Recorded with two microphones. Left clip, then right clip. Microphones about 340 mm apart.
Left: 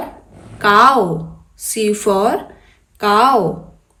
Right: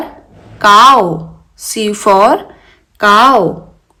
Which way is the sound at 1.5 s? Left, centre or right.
Centre.